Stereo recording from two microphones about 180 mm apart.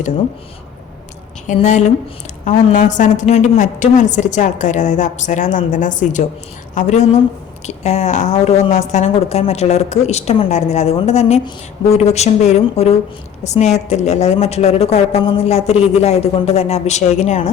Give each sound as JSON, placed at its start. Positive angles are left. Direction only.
{"t": 1.5, "sound": "a woman's voice", "side_deg": 40}